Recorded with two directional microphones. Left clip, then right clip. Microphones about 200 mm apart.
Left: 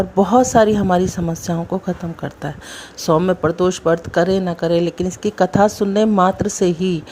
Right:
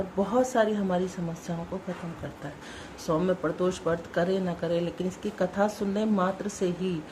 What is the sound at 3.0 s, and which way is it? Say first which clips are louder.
Speech: left 11 dB; 45° left (ahead or behind).